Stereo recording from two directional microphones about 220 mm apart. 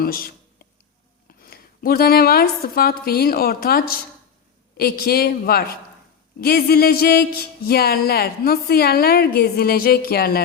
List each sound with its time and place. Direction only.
0.0 s a woman's voice: 45° left (ahead or behind)